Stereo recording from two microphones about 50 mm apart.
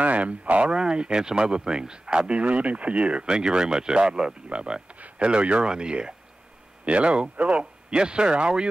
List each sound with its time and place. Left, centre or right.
0.0 s speech: right